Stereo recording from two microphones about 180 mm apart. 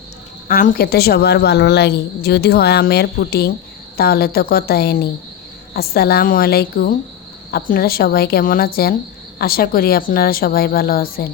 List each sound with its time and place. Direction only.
0.4 s speech: 50° left (ahead or behind)